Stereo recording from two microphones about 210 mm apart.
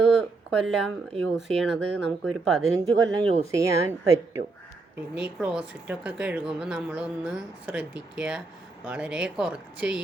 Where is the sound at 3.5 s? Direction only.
15° right (ahead or behind).